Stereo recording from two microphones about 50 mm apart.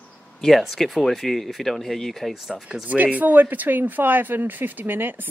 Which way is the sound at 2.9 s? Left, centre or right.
Right.